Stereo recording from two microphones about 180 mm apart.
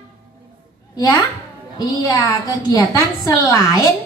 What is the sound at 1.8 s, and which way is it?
A woman's voice, 20° left (ahead or behind).